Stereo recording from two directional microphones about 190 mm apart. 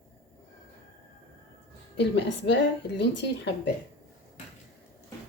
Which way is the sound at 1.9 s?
65° left (ahead or behind).